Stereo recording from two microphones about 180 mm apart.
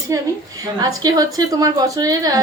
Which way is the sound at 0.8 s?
20° right (ahead or behind).